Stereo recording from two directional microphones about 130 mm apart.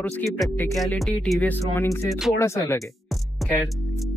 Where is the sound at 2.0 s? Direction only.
Centre (ahead or behind).